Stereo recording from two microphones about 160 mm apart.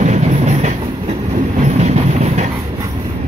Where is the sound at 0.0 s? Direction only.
45° right (ahead or behind).